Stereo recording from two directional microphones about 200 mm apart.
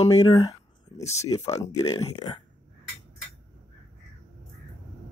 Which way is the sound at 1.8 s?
20° left (ahead or behind).